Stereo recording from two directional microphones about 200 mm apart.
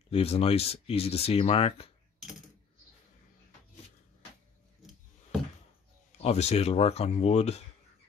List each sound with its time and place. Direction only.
0.1 s speech: 30° left (ahead or behind)
6.2 s speech: 30° left (ahead or behind)